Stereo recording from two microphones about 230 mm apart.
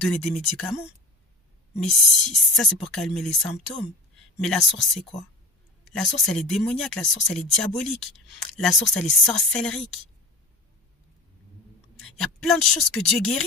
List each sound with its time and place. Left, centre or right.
0.0 s speech: centre
12.0 s speech: centre